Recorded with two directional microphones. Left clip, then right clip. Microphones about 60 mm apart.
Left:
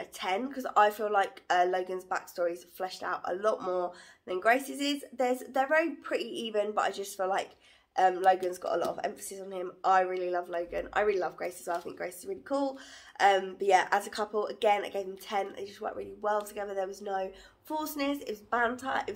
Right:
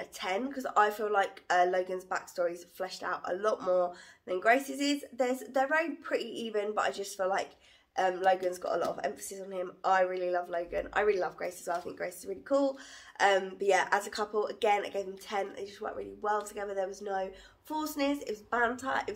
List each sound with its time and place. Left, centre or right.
0.0 s speech: left